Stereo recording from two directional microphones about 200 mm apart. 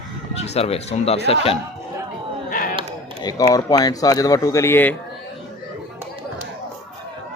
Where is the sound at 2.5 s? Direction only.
40° left (ahead or behind).